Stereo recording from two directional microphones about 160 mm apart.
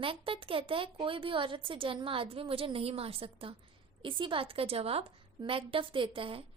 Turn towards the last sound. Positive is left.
turn(degrees=-35)  # may be behind; listen again after turning